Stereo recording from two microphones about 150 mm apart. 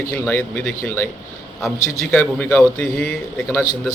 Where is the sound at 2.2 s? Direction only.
10° left (ahead or behind).